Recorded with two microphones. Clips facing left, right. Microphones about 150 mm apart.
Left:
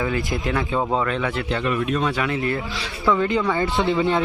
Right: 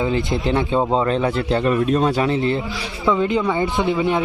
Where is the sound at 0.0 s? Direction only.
25° right (ahead or behind).